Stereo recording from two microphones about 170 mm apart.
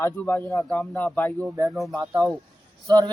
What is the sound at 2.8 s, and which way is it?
Speech, 20° right (ahead or behind).